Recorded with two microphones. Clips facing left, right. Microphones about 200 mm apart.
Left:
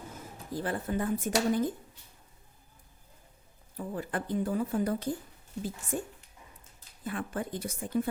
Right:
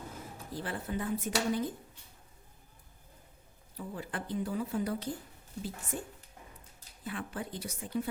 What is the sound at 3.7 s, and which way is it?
A woman's voice, 50° left (ahead or behind).